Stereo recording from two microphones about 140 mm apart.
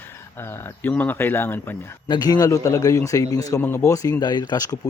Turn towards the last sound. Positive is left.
turn(degrees=30)  # may be behind; listen again after turning